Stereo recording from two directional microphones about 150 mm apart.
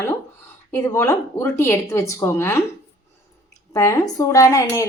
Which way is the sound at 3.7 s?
20° left (ahead or behind).